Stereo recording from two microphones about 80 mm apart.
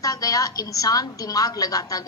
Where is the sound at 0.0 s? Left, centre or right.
Left.